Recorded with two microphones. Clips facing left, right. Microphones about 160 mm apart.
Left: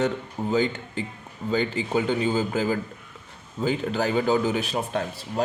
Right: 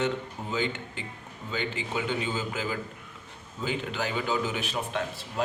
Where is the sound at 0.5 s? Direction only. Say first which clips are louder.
Left 6 dB; 40° left (ahead or behind).